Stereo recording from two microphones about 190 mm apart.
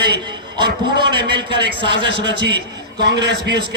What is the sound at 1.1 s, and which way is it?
Speech, 60° right (ahead or behind).